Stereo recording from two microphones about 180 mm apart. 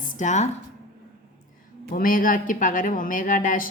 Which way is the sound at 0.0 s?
45° left (ahead or behind).